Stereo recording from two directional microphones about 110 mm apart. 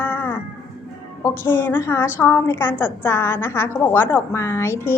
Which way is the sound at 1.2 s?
20° left (ahead or behind).